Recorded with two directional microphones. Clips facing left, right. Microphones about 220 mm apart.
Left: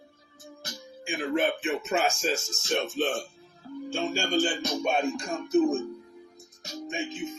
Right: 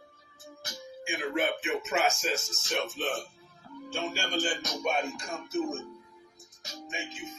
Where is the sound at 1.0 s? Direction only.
35° left (ahead or behind).